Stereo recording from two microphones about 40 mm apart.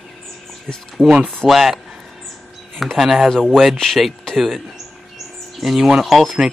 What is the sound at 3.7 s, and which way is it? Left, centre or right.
Speech, centre.